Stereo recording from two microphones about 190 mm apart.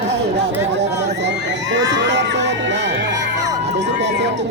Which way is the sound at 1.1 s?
65° right (ahead or behind).